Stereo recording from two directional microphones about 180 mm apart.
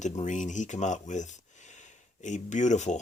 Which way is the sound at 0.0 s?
45° left (ahead or behind).